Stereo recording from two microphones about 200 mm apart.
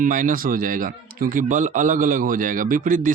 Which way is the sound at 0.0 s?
40° right (ahead or behind).